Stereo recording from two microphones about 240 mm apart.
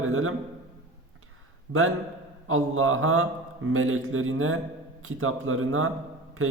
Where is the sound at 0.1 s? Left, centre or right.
Right.